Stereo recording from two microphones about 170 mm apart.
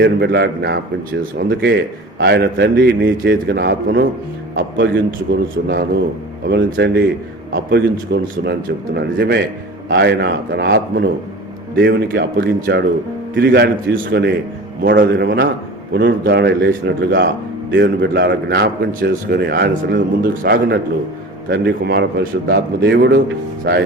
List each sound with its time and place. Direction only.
0.0 s a man's voice: 70° right (ahead or behind)
21.5 s a man's voice: 80° right